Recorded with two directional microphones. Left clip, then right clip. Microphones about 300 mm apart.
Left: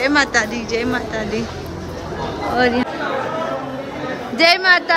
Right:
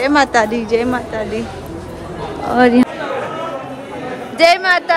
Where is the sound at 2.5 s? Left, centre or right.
Centre.